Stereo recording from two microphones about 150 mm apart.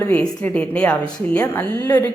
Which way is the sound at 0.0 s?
15° left (ahead or behind).